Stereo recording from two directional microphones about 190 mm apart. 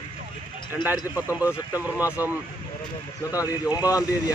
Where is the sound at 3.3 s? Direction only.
20° left (ahead or behind).